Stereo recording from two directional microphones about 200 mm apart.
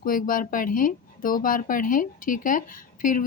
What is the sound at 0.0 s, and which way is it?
Speech, 45° left (ahead or behind).